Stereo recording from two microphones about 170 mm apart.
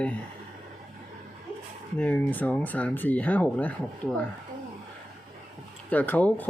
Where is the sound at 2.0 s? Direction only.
10° left (ahead or behind).